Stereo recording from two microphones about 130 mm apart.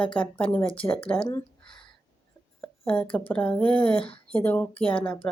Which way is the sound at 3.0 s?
10° left (ahead or behind).